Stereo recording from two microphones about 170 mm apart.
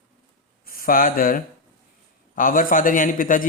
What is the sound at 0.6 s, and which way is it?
A man's voice, 55° left (ahead or behind).